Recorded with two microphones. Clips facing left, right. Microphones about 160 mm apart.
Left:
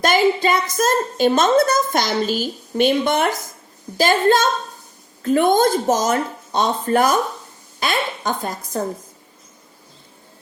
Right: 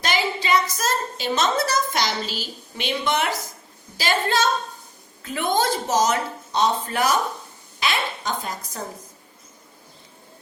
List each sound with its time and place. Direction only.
0.0 s a woman's voice: 50° left (ahead or behind)